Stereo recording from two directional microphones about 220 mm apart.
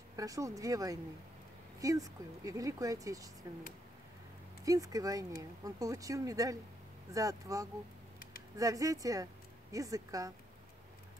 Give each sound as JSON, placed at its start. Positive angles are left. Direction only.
{"t": 0.1, "sound": "speech", "side_deg": -15}
{"t": 4.6, "sound": "a woman's voice", "side_deg": -15}